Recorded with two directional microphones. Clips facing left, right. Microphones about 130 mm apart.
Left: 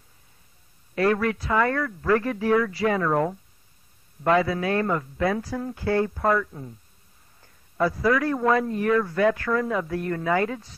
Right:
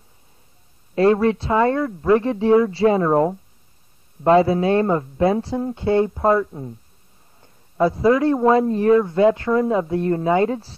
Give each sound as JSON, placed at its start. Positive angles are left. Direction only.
{"t": 0.9, "sound": "a man's voice", "side_deg": -25}